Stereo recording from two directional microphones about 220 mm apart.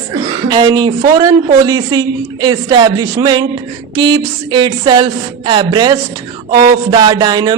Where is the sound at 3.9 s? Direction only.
20° right (ahead or behind).